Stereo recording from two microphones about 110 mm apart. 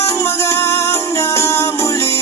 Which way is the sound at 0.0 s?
25° left (ahead or behind).